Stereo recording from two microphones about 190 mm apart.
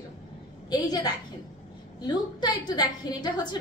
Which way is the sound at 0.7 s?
20° left (ahead or behind).